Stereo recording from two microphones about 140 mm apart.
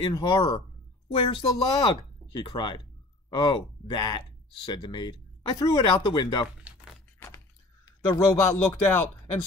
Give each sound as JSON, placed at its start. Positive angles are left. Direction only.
{"t": 0.0, "sound": "speech", "side_deg": 30}
{"t": 7.8, "sound": "a sound", "side_deg": 30}
{"t": 8.4, "sound": "speech", "side_deg": 20}